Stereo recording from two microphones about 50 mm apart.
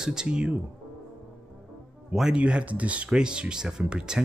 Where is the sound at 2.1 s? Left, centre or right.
Centre.